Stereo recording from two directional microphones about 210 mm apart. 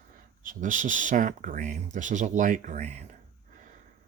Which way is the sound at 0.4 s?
40° right (ahead or behind).